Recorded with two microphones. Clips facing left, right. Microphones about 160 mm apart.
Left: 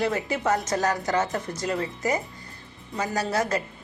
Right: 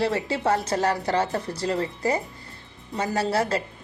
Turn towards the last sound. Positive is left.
turn(degrees=-30)  # may be behind; listen again after turning